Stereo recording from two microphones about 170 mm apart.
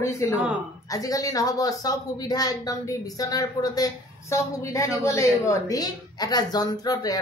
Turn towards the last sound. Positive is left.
turn(degrees=20)  # may be behind; listen again after turning